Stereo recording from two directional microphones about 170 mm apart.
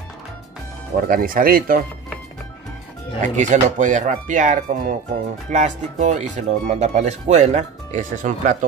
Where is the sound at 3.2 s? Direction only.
45° right (ahead or behind).